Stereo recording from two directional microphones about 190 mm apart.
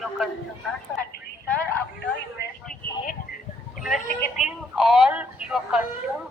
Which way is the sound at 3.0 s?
45° left (ahead or behind).